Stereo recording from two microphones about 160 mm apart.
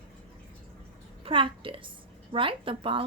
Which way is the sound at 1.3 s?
35° right (ahead or behind).